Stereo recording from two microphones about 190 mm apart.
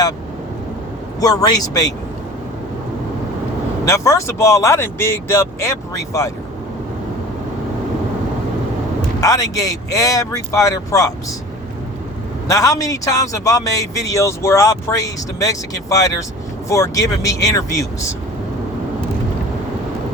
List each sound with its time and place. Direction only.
1.2 s speech: 20° left (ahead or behind)
3.8 s a man's voice: 15° left (ahead or behind)
9.2 s a man's voice: 20° left (ahead or behind)
12.5 s a man's voice: 15° left (ahead or behind)